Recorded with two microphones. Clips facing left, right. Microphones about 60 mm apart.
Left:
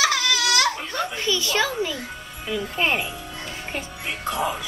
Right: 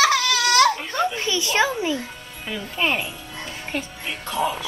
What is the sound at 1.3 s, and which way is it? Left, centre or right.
Speech, right.